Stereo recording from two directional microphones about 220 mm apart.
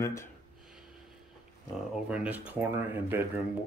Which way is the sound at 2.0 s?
5° right (ahead or behind).